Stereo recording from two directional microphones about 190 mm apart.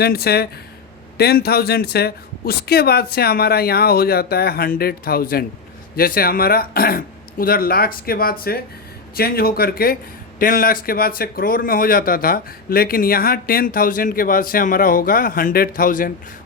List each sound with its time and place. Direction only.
0.0 s speech: 55° left (ahead or behind)